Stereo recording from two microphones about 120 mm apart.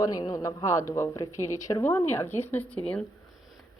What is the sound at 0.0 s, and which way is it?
A woman's voice, 30° left (ahead or behind).